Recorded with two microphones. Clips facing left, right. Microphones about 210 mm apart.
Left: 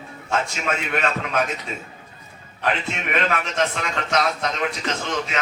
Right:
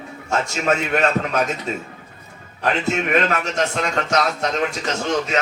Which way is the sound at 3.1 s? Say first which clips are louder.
Left 1 dB; 40° right (ahead or behind).